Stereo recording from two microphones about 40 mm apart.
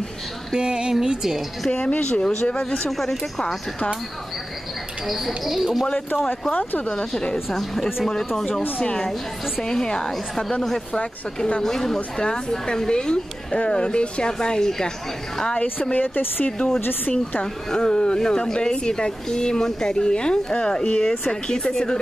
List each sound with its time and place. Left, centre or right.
0.5 s speech: right
1.0 s a woman's voice: centre
1.9 s speech: left
3.0 s a woman's voice: centre
5.0 s speech: centre
7.0 s speech: left
7.5 s a woman's voice: centre
8.8 s a woman's voice: left
11.3 s speech: left
11.6 s a woman's voice: centre
15.5 s speech: left
16.4 s speech: left
21.0 s a woman's voice: centre